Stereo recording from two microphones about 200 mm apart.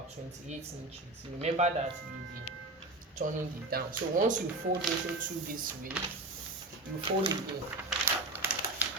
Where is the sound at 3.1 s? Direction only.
45° right (ahead or behind).